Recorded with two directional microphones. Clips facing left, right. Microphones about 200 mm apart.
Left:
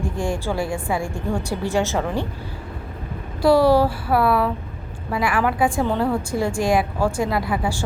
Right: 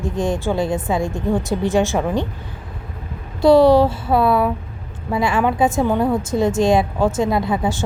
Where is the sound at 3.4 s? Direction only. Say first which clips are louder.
Right 4 dB; 20° right (ahead or behind).